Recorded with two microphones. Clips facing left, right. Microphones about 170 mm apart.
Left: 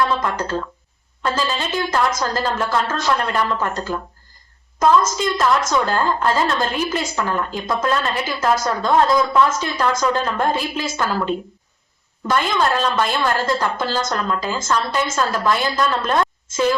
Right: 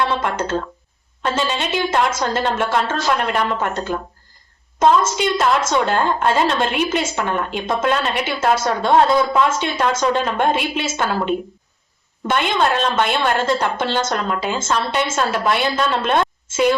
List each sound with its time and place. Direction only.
0.3 s a woman's voice: 25° right (ahead or behind)
10.5 s a woman's voice: 70° right (ahead or behind)
10.8 s a woman's voice: 25° right (ahead or behind)
12.5 s a woman's voice: 25° right (ahead or behind)